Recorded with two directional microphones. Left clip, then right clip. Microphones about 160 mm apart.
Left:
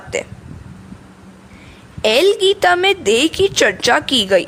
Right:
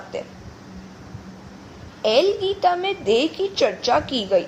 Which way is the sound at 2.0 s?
60° left (ahead or behind).